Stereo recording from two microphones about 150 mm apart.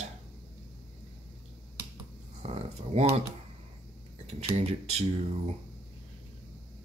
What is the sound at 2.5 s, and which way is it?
Speech, 45° right (ahead or behind).